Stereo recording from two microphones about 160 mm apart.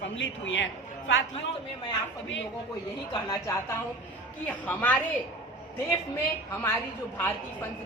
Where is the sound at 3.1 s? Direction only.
25° left (ahead or behind).